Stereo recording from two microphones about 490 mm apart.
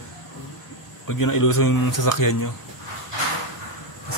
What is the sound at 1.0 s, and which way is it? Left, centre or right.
Speech, left.